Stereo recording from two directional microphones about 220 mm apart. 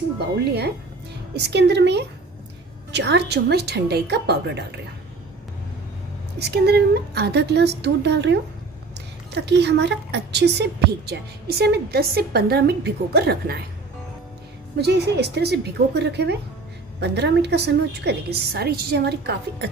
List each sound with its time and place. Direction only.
0.4 s a woman's voice: 50° right (ahead or behind)
6.3 s a woman's voice: 50° right (ahead or behind)
14.8 s a woman's voice: 50° right (ahead or behind)